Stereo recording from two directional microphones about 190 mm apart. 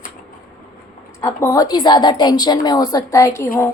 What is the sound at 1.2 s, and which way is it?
A woman's voice, 15° left (ahead or behind).